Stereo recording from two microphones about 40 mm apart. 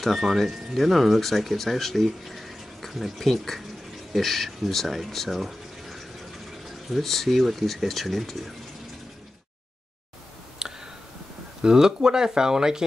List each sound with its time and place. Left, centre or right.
0.0 s speech: centre
10.6 s a sound: centre
11.6 s speech: centre